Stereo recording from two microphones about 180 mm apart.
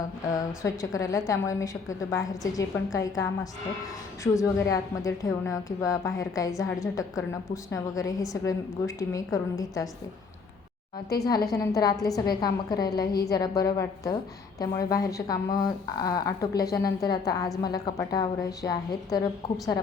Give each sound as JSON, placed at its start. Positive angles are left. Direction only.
{"t": 0.3, "sound": "a woman's voice", "side_deg": 20}
{"t": 11.2, "sound": "a woman's voice", "side_deg": 20}